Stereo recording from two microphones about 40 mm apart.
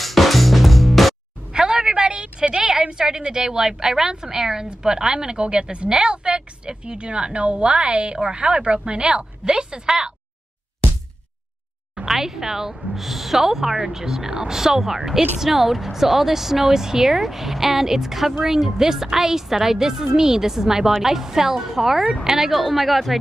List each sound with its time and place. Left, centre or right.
0.0 s music: centre
1.5 s a sound: right
2.8 s a woman's voice: centre
12.1 s a woman's voice: centre